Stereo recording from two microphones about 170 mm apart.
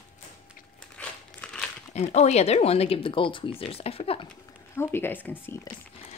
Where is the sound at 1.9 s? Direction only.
40° left (ahead or behind).